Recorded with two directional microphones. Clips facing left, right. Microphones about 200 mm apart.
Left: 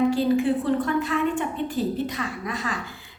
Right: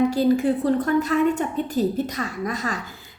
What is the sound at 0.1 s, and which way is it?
A woman's voice, 40° right (ahead or behind).